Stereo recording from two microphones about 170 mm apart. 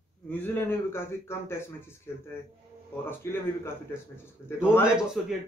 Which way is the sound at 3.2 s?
15° left (ahead or behind).